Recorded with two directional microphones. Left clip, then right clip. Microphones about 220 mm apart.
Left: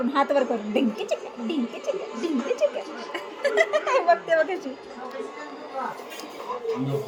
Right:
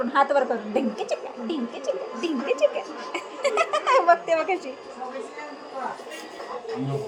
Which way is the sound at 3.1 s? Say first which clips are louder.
Left 1 dB; 10° right (ahead or behind).